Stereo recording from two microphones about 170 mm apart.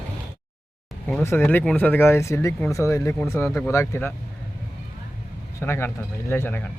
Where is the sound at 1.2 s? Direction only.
15° left (ahead or behind).